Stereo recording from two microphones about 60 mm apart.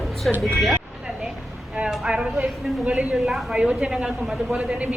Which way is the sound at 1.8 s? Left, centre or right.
Centre.